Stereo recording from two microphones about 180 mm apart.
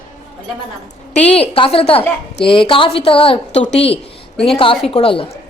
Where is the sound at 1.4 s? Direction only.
30° left (ahead or behind).